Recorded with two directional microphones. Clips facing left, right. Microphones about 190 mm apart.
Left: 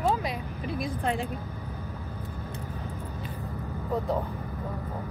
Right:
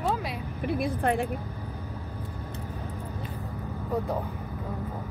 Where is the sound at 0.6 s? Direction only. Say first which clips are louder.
Right 4 dB; 60° right (ahead or behind).